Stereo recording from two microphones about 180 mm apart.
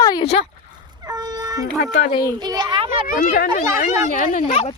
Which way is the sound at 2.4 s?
25° right (ahead or behind).